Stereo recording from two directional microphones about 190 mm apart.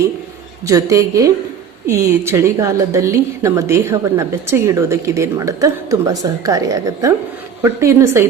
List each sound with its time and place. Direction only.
0.7 s a woman's voice: 15° right (ahead or behind)